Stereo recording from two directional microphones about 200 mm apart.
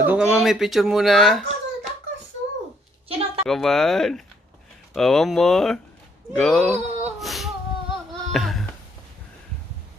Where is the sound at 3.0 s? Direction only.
30° right (ahead or behind).